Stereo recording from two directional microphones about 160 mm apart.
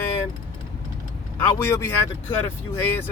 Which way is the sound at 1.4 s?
15° left (ahead or behind).